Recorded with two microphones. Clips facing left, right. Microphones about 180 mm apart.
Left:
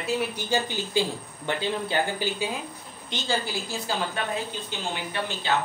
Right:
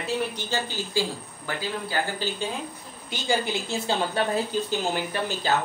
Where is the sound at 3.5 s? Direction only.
25° right (ahead or behind).